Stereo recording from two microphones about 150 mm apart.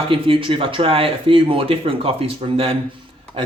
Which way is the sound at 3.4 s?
35° right (ahead or behind).